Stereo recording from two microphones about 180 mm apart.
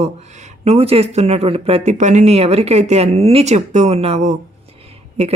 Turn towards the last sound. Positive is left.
turn(degrees=-35)  # may be behind; listen again after turning